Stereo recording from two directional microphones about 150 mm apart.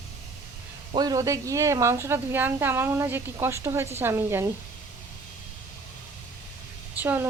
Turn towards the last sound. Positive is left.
turn(degrees=-15)  # may be behind; listen again after turning